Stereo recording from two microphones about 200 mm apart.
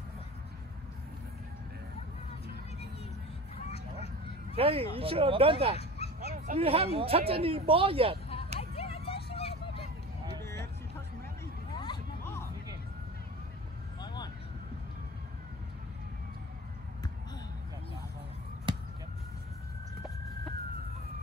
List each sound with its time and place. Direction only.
3.6 s a sound: 30° left (ahead or behind)
4.6 s speech: 30° right (ahead or behind)
6.0 s dog: 30° left (ahead or behind)
6.3 s speech: 35° right (ahead or behind)
8.5 s a sound: 30° left (ahead or behind)
10.4 s vehicle: 15° left (ahead or behind)
11.7 s a sound: 25° left (ahead or behind)
14.0 s vehicle: 20° left (ahead or behind)
18.7 s basketball bounce: 25° right (ahead or behind)